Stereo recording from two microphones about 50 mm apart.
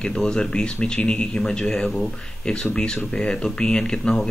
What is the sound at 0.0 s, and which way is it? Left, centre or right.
Speech, centre.